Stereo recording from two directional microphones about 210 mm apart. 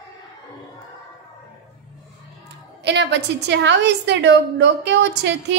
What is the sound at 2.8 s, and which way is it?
A woman's voice, 55° right (ahead or behind).